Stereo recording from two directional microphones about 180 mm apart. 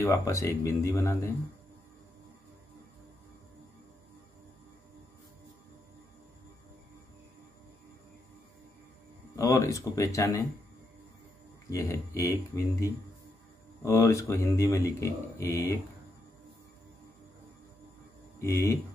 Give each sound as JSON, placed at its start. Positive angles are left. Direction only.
{"t": 0.0, "sound": "speech", "side_deg": 15}
{"t": 9.3, "sound": "speech", "side_deg": 15}
{"t": 11.7, "sound": "speech", "side_deg": 15}
{"t": 18.4, "sound": "speech", "side_deg": 15}